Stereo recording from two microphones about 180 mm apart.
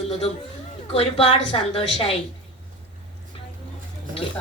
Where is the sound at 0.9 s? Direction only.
30° left (ahead or behind).